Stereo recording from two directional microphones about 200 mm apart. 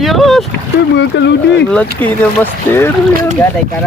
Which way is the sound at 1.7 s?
5° left (ahead or behind).